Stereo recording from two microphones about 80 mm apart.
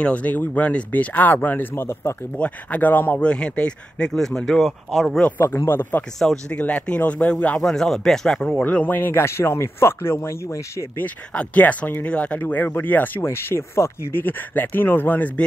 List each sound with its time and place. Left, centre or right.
0.0 s speech: centre
2.3 s speech: centre
5.7 s speech: left
7.6 s speech: centre; by 10.9 s left
11.0 s speech: centre